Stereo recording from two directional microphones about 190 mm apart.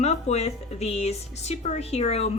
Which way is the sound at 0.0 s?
35° left (ahead or behind).